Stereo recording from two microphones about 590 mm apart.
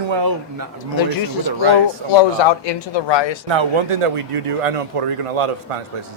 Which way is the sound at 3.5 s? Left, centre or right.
Right.